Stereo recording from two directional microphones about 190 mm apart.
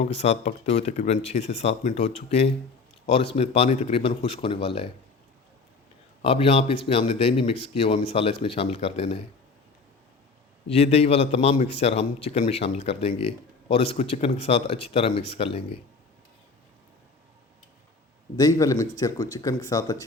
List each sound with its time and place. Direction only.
0.2 s a man's voice: 35° left (ahead or behind)
6.2 s a man's voice: 30° left (ahead or behind)
10.7 s a man's voice: 35° left (ahead or behind)
18.3 s speech: 15° left (ahead or behind)